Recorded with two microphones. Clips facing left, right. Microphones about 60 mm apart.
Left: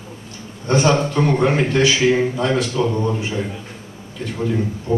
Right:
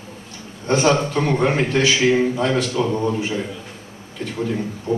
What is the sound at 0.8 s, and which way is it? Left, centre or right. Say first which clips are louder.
A man's voice: left 1 dB; centre.